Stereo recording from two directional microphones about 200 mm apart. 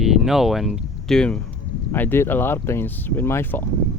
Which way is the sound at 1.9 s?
10° left (ahead or behind).